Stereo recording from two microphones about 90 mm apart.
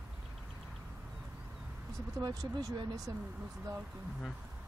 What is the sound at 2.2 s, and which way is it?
Speech, 45° right (ahead or behind).